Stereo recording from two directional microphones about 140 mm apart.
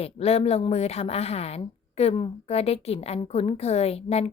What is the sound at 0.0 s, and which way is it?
A woman's voice, 45° left (ahead or behind).